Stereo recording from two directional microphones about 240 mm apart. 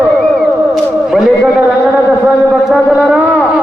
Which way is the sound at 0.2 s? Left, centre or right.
Centre.